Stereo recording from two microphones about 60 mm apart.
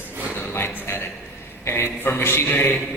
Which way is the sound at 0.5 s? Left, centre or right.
Left.